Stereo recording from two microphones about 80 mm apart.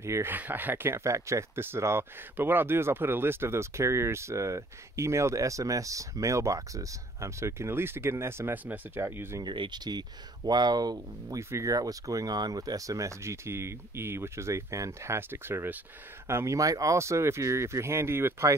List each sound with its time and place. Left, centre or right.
0.0 s speech: right
0.3 s speech: right
9.4 s speech: right
11.2 s speech: right